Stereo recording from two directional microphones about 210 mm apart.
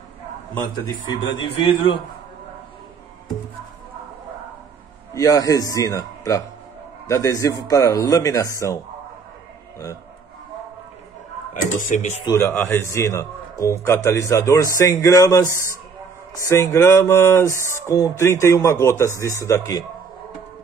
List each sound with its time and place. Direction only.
0.8 s a man's voice: 20° left (ahead or behind)
5.1 s speech: 15° left (ahead or behind)
11.9 s speech: 35° left (ahead or behind)
12.3 s speech: 10° left (ahead or behind)